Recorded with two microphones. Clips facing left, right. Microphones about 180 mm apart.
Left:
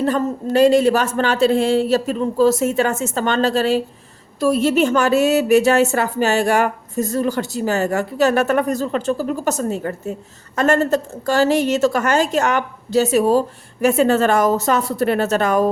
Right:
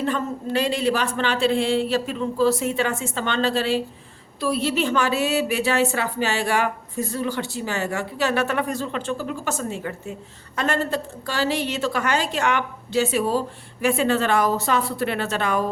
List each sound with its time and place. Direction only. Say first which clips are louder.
0.0 s a woman's voice: left 6 dB; 40° left (ahead or behind)